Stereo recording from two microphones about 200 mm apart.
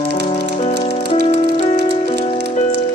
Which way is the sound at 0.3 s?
30° left (ahead or behind).